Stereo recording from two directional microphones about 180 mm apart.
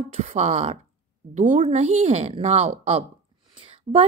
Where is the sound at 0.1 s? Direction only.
35° right (ahead or behind).